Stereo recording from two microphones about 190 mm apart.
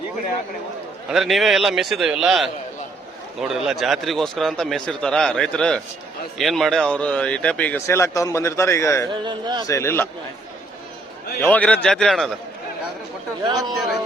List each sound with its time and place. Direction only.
1.1 s a man's voice: centre (ahead or behind); by 9.0 s 15° left (ahead or behind)
9.0 s a man's voice: 25° right (ahead or behind)
9.6 s speech: 15° left (ahead or behind)
11.3 s a man's voice: 10° left (ahead or behind)
13.4 s a man's voice: 20° right (ahead or behind)